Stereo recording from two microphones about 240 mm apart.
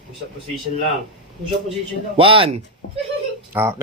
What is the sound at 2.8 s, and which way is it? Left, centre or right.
Speech, left.